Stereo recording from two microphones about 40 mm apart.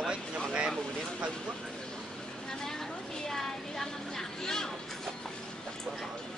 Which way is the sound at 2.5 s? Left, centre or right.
Centre.